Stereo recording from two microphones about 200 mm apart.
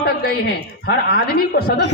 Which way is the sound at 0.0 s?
55° left (ahead or behind).